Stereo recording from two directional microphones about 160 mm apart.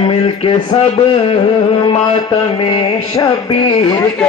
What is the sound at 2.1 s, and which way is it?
Music, 35° left (ahead or behind).